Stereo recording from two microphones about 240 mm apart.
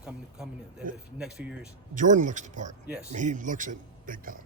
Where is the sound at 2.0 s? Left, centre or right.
Right.